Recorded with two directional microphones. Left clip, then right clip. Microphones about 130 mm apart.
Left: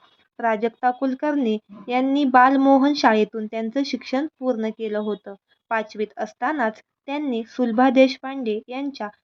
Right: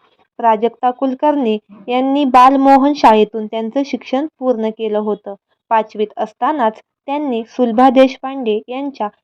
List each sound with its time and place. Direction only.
0.3 s speech: 20° right (ahead or behind)